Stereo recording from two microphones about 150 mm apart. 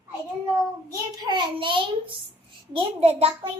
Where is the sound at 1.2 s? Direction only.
30° right (ahead or behind).